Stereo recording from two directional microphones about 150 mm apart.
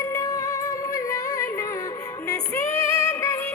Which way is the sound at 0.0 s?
20° left (ahead or behind).